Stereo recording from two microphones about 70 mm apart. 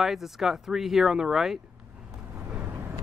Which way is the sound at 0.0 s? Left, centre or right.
Centre.